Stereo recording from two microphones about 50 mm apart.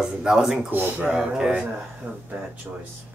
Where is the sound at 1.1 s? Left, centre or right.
Centre.